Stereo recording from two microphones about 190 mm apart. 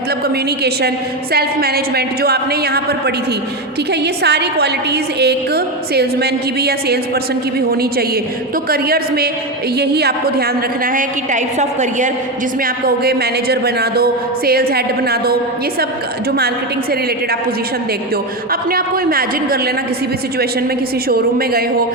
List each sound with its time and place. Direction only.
1.3 s a woman's voice: 55° right (ahead or behind)
4.0 s a woman's voice: 60° right (ahead or behind)
10.9 s a woman's voice: 40° right (ahead or behind)
12.6 s a woman's voice: 50° right (ahead or behind)
18.7 s a woman's voice: 50° right (ahead or behind)
21.1 s a woman's voice: 50° right (ahead or behind)